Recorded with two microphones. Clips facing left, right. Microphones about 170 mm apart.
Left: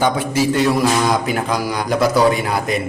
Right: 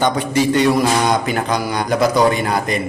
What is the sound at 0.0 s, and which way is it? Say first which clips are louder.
Mantra: right 1 dB; 5° left (ahead or behind).